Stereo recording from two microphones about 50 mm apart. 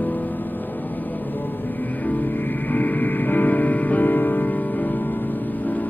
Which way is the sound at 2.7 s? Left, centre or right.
Left.